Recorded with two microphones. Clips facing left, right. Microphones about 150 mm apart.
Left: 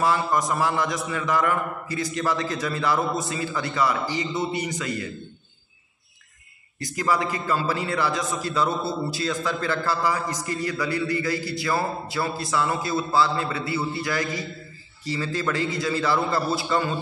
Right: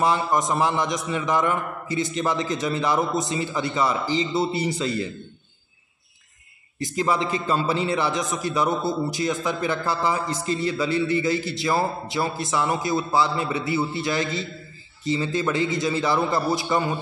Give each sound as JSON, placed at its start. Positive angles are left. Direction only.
{"t": 0.0, "sound": "a man's voice", "side_deg": -20}
{"t": 6.8, "sound": "a man's voice", "side_deg": -20}